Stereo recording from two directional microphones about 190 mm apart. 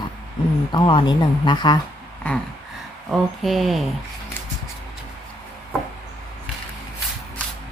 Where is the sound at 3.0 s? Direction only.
Centre (ahead or behind).